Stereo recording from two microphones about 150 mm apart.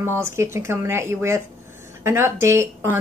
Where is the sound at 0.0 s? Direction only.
15° right (ahead or behind).